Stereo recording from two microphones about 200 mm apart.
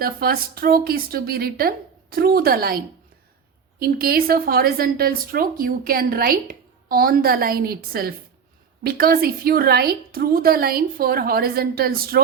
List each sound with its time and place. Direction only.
0.0 s a woman's voice: 50° right (ahead or behind)